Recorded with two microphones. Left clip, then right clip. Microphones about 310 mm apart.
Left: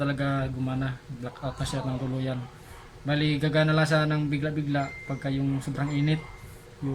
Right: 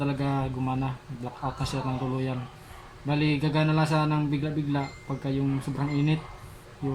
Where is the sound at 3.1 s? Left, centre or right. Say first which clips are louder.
Even; left.